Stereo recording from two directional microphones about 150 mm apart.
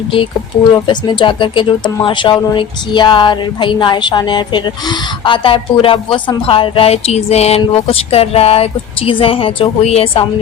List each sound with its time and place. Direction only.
0.9 s speech: 30° left (ahead or behind)